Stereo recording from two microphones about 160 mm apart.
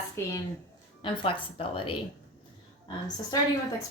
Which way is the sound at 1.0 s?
35° left (ahead or behind).